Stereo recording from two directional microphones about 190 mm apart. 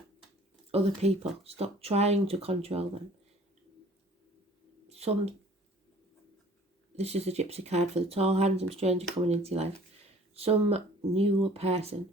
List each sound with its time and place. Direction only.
0.7 s speech: 35° right (ahead or behind)
4.9 s speech: 35° right (ahead or behind)
6.9 s speech: 35° right (ahead or behind)